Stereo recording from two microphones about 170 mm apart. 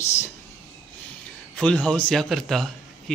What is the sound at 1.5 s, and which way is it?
A man's voice, 10° left (ahead or behind).